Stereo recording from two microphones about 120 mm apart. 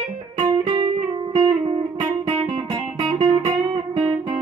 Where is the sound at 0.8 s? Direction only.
50° right (ahead or behind).